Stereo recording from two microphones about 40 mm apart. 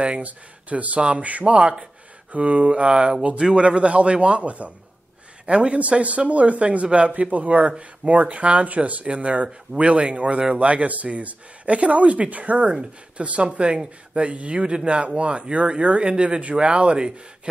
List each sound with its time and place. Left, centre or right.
0.0 s a man's voice: right